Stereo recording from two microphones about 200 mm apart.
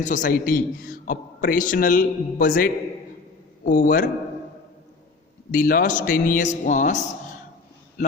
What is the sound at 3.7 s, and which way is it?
Speech, 45° left (ahead or behind).